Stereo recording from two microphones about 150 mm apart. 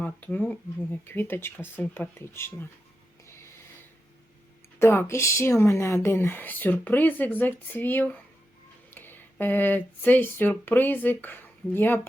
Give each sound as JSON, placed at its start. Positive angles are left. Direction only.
{"t": 0.0, "sound": "speech", "side_deg": 10}
{"t": 3.2, "sound": "a sound", "side_deg": 15}
{"t": 4.8, "sound": "speech", "side_deg": 15}